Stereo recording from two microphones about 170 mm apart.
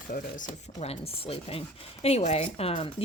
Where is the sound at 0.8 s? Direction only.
35° left (ahead or behind).